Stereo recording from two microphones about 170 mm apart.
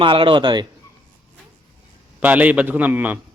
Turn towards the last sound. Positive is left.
turn(degrees=-10)  # may be behind; listen again after turning